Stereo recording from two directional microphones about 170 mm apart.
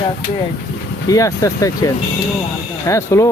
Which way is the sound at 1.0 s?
20° left (ahead or behind).